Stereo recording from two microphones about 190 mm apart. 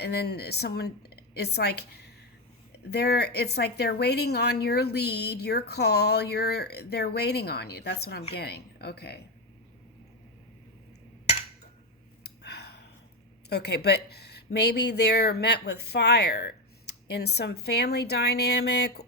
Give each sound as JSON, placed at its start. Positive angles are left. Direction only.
{"t": 0.0, "sound": "a woman's voice", "side_deg": 60}
{"t": 12.2, "sound": "a sound", "side_deg": 60}
{"t": 13.5, "sound": "speech", "side_deg": 60}